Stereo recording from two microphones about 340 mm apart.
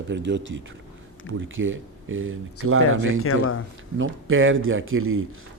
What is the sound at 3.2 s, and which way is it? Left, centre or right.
Speech, left.